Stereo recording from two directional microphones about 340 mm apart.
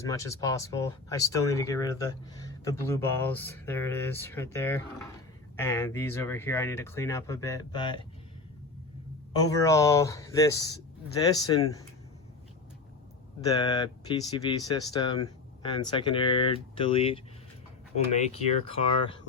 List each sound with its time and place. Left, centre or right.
0.0 s speech: centre
9.3 s speech: centre
13.5 s speech: centre